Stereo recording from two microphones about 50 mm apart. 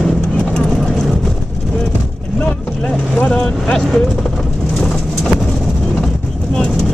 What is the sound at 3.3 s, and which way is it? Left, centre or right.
Vehicle, centre.